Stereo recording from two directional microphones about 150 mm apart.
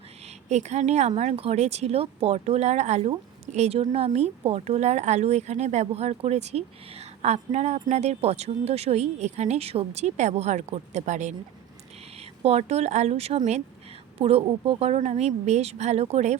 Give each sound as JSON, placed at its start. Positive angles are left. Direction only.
{"t": 0.4, "sound": "speech", "side_deg": -50}
{"t": 12.4, "sound": "speech", "side_deg": -45}